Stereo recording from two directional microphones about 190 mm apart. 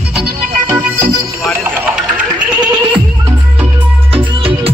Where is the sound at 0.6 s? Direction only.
15° right (ahead or behind).